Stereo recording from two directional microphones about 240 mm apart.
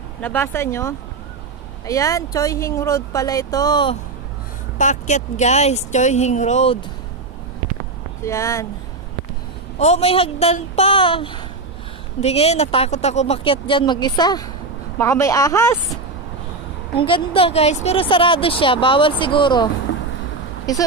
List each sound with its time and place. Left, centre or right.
0.2 s speech: centre
4.7 s speech: left
8.2 s speech: centre
9.8 s speech: left; by 15.8 s centre
16.9 s speech: left